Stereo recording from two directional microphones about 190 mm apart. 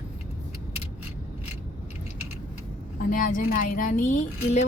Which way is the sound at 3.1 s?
45° left (ahead or behind).